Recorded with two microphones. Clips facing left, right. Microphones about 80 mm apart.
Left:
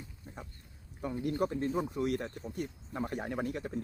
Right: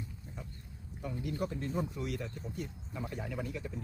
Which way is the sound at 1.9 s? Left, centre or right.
Left.